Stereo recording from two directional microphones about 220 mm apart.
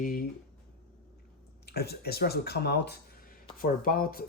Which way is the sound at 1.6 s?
45° left (ahead or behind).